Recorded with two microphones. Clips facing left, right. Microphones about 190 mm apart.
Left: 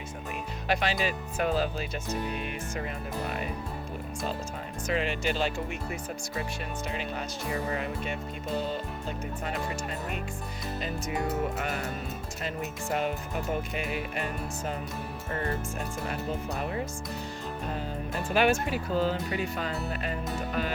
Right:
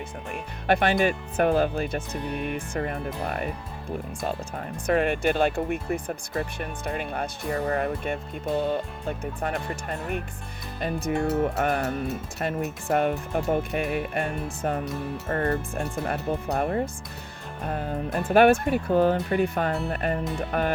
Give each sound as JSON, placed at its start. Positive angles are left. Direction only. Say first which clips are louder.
{"t": 0.7, "sound": "speech", "louder": "right 7 dB", "side_deg": -55}
{"t": 4.9, "sound": "speech", "louder": "right 7 dB", "side_deg": -55}
{"t": 10.8, "sound": "speech", "louder": "right 7 dB", "side_deg": -50}